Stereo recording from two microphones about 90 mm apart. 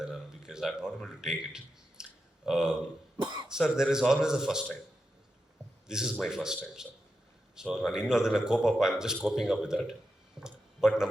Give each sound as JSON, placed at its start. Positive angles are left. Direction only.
{"t": 0.0, "sound": "a sound", "side_deg": -5}
{"t": 3.2, "sound": "cough", "side_deg": -55}
{"t": 3.5, "sound": "speech", "side_deg": -5}
{"t": 5.9, "sound": "speech", "side_deg": -5}